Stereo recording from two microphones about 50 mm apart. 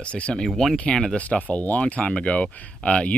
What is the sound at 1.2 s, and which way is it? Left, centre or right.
Speech, left.